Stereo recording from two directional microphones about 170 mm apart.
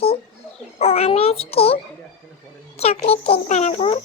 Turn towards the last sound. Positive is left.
turn(degrees=30)  # may be behind; listen again after turning